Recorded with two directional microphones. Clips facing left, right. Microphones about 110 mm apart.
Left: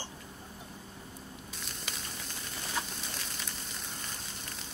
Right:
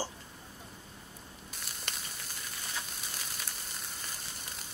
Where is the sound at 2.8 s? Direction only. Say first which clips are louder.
Left 8 dB; 70° left (ahead or behind).